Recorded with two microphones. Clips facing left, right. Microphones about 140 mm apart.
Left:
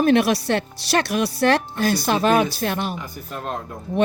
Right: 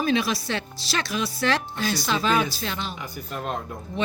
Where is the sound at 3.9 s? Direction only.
55° left (ahead or behind).